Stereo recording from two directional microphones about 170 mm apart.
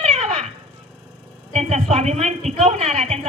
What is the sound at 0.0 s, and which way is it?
Cat, 40° right (ahead or behind).